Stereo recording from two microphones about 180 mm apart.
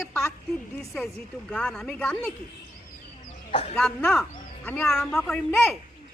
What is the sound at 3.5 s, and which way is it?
Speech, 35° left (ahead or behind).